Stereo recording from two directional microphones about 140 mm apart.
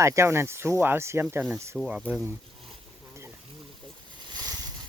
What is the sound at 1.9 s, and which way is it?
Speech, 5° right (ahead or behind).